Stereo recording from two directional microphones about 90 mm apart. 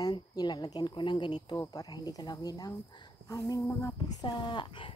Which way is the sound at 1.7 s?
50° left (ahead or behind).